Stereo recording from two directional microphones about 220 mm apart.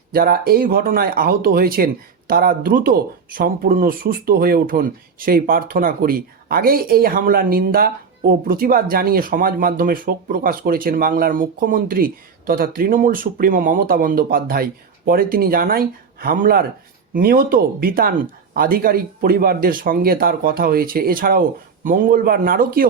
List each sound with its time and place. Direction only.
0.1 s speech: 45° right (ahead or behind)